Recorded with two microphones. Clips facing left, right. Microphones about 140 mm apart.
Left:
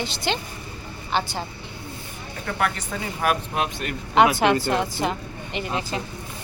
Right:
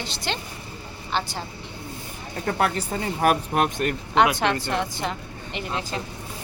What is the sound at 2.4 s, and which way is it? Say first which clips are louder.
Speech: right 2 dB; 35° right (ahead or behind).